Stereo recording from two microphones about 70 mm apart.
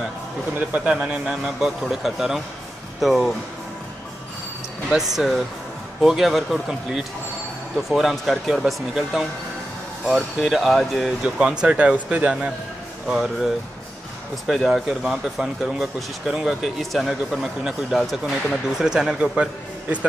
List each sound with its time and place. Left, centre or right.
0.6 s speech: centre
4.8 s speech: centre
14.5 s speech: centre